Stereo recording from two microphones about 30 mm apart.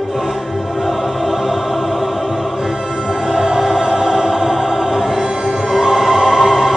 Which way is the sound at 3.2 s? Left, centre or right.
Centre.